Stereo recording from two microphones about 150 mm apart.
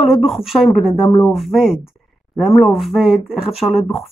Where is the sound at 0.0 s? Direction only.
Centre (ahead or behind).